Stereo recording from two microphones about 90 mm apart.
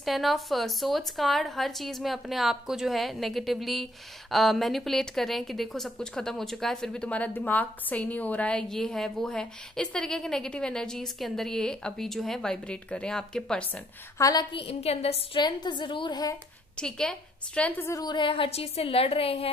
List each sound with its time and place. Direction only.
0.0 s a woman's voice: centre (ahead or behind)
14.1 s a woman's voice: 40° left (ahead or behind)
14.4 s speech: 90° left
15.4 s a woman's voice: 55° left (ahead or behind)
16.7 s a woman's voice: 5° left (ahead or behind)
18.0 s speech: 60° left (ahead or behind); by 19.5 s 90° left